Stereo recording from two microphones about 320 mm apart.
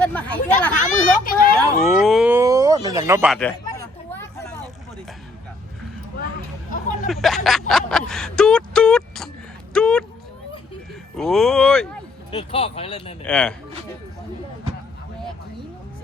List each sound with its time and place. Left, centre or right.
0.0 s speech: centre
0.8 s a sound: left
1.8 s a sound: centre
3.7 s hubbub: centre
7.1 s speech: centre
7.7 s a sound: centre
11.2 s speech: centre
12.3 s speech: centre
13.2 s speech: centre